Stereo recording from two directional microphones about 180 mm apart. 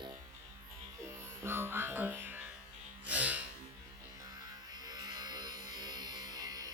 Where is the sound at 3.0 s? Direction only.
10° right (ahead or behind).